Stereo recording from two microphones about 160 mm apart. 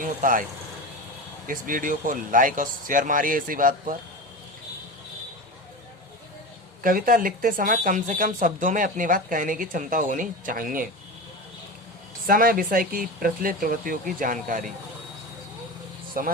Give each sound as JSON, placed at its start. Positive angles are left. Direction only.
{"t": 0.0, "sound": "speech", "side_deg": -55}
{"t": 1.5, "sound": "speech", "side_deg": -60}
{"t": 6.8, "sound": "speech", "side_deg": -60}
{"t": 12.2, "sound": "speech", "side_deg": -65}
{"t": 16.1, "sound": "speech", "side_deg": -65}